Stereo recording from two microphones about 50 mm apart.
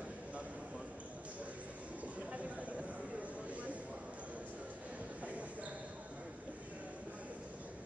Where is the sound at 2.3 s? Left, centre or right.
Right.